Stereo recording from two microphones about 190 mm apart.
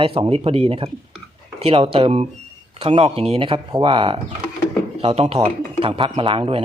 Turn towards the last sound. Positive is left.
turn(degrees=-30)  # may be behind; listen again after turning